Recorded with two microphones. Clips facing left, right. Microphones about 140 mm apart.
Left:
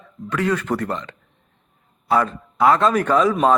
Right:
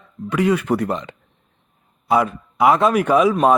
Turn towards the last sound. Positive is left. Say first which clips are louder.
# right 2 dB
turn(degrees=-10)  # may be behind; listen again after turning